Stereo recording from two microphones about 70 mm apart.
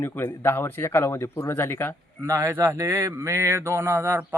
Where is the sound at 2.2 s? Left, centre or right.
Right.